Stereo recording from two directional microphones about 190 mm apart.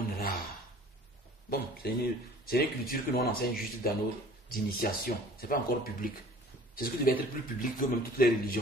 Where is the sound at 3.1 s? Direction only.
50° left (ahead or behind).